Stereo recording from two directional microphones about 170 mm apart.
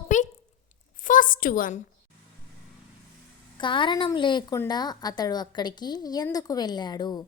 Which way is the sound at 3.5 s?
30° left (ahead or behind).